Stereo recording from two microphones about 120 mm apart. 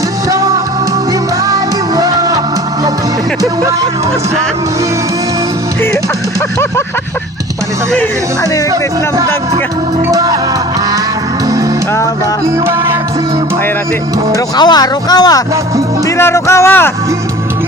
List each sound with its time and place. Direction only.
0.3 s music: 25° right (ahead or behind)
8.7 s music: 30° right (ahead or behind)
14.3 s speech: 35° left (ahead or behind)
16.0 s speech: 20° left (ahead or behind)